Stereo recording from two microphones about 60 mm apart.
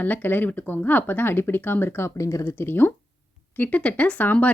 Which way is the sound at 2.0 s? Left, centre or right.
Left.